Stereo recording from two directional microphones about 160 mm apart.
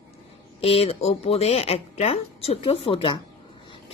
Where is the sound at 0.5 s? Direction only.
35° left (ahead or behind).